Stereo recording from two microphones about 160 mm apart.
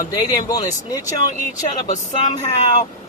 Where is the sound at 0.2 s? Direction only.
20° left (ahead or behind).